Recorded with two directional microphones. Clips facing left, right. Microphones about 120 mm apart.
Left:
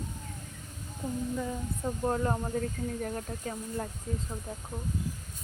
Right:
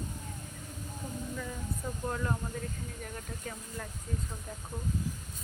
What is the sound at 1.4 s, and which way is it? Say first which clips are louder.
Speech: left 5 dB; 25° left (ahead or behind).